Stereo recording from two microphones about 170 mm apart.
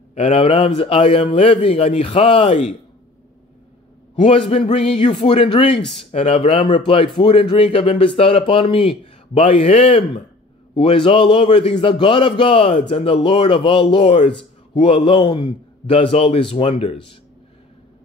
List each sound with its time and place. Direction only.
0.1 s speech: 35° left (ahead or behind)
4.1 s speech: 35° left (ahead or behind)